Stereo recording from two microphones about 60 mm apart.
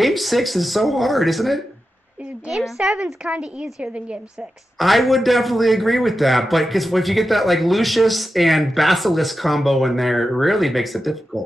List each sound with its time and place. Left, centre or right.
0.0 s a man's voice: centre
4.7 s a man's voice: centre